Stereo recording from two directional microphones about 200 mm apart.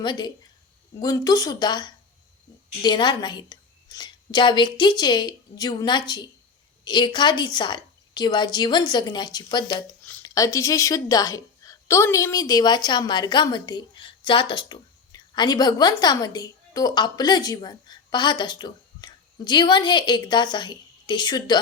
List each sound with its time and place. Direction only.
0.0 s a woman's voice: 20° left (ahead or behind)